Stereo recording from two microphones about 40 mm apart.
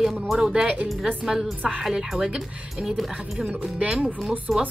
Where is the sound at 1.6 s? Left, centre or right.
Centre.